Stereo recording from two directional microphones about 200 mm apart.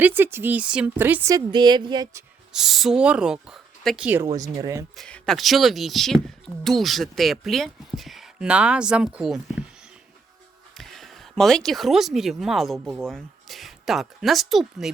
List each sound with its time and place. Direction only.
0.0 s a woman's voice: 10° right (ahead or behind)
2.5 s speech: centre (ahead or behind)
4.4 s a woman's voice: 20° right (ahead or behind)
4.9 s speech: 5° left (ahead or behind)
10.8 s speech: centre (ahead or behind)